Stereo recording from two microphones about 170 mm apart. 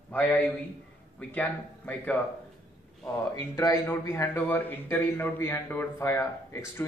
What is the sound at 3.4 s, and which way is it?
A man's voice, 15° left (ahead or behind).